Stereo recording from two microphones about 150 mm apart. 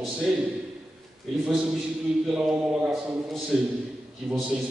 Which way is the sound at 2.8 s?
Centre (ahead or behind).